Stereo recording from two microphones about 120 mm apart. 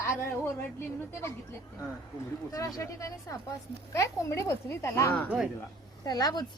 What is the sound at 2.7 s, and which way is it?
Speech, 25° left (ahead or behind).